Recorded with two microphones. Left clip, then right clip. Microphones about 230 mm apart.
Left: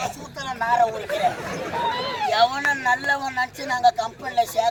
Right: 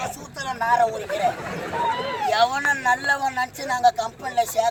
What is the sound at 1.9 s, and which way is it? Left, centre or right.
Speech, left.